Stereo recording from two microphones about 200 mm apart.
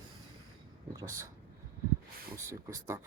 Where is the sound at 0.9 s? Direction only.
15° right (ahead or behind).